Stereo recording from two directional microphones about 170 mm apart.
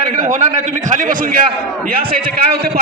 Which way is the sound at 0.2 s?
45° right (ahead or behind).